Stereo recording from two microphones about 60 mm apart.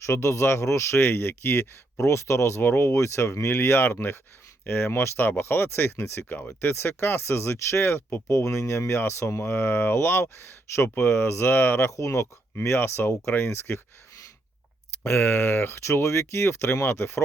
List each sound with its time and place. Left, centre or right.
0.0 s speech: left
2.9 s speech: left
12.5 s speech: left
15.0 s speech: left